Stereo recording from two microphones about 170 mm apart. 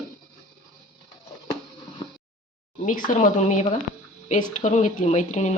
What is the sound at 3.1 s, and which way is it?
A woman's voice, 50° left (ahead or behind).